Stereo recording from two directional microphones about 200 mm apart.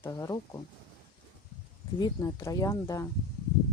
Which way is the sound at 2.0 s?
20° left (ahead or behind).